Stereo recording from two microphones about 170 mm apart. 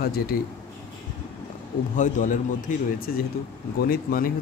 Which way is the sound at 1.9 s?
50° left (ahead or behind).